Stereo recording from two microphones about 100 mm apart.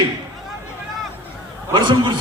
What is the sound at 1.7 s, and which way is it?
Speech, 50° right (ahead or behind).